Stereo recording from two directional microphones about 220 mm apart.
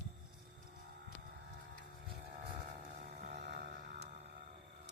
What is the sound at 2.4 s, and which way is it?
Vehicle, 40° right (ahead or behind).